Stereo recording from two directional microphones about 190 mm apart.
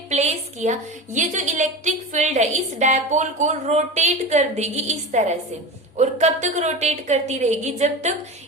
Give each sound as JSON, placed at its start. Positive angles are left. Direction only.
{"t": 0.1, "sound": "a woman's voice", "side_deg": -35}